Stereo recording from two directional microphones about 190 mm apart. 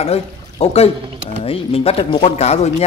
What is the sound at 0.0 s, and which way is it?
Speech, 30° left (ahead or behind).